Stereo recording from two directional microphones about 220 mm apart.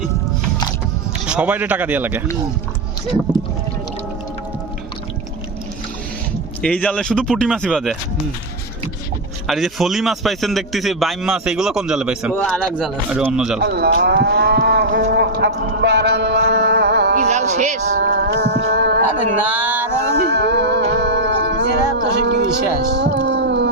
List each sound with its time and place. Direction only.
1.3 s speech: 5° right (ahead or behind)
6.6 s a man's voice: 5° left (ahead or behind)
9.5 s a man's voice: centre (ahead or behind)
13.6 s moo: 45° right (ahead or behind)
17.2 s music: 30° right (ahead or behind)
17.9 s a sound: 50° right (ahead or behind)
20.1 s music: 45° right (ahead or behind)